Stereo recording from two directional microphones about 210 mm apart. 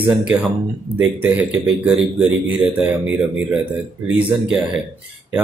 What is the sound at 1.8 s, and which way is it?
Speech, 5° right (ahead or behind).